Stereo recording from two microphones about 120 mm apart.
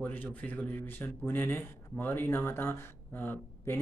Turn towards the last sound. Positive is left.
turn(degrees=15)  # may be behind; listen again after turning